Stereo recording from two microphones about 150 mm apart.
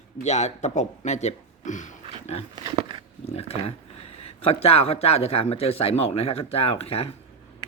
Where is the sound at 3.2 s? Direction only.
45° left (ahead or behind).